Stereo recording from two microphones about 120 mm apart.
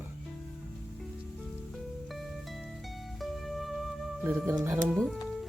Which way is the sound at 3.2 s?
Centre (ahead or behind).